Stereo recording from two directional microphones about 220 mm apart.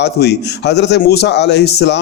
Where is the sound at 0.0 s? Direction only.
50° left (ahead or behind).